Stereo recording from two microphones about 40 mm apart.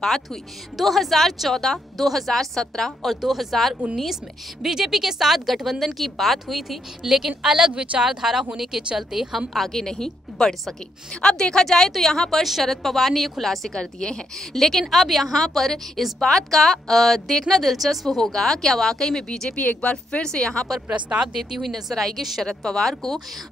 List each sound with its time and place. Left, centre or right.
0.0 s a woman's voice: centre
0.7 s a woman's voice: centre
3.2 s a woman's voice: centre
7.5 s speech: centre
9.7 s a woman's voice: centre
11.1 s a woman's voice: left; by 13.7 s centre
13.7 s a woman's voice: centre
14.6 s a woman's voice: centre
19.5 s a woman's voice: left; by 20.6 s centre
21.4 s speech: centre
21.9 s a woman's voice: centre